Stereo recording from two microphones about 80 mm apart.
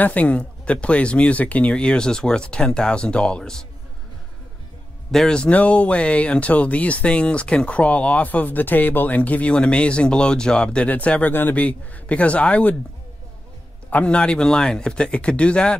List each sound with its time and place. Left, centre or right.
0.0 s speech: centre
5.1 s speech: centre
13.8 s speech: centre